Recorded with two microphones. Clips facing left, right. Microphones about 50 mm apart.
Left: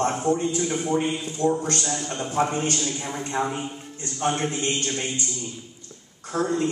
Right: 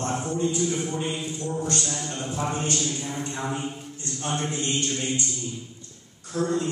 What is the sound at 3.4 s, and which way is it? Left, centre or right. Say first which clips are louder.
Speech: left 3 dB; centre.